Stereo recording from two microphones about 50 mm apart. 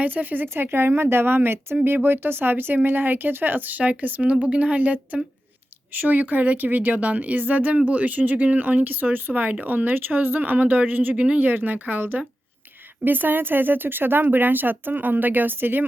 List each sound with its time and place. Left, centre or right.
0.0 s speech: right
0.4 s a woman's voice: right
11.1 s speech: right
11.4 s speech: right